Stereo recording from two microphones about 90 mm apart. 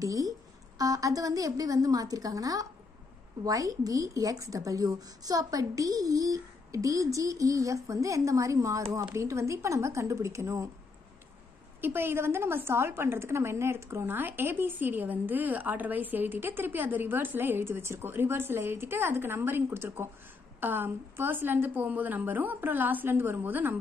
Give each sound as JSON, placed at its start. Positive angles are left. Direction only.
{"t": 0.0, "sound": "a woman's voice", "side_deg": -40}
{"t": 11.8, "sound": "a woman's voice", "side_deg": -25}